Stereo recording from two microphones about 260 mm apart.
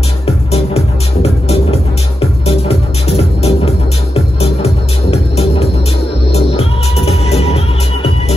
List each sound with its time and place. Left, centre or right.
0.5 s music: left